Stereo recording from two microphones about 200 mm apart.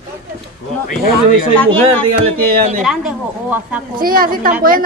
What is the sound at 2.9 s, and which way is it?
Speech, 5° right (ahead or behind).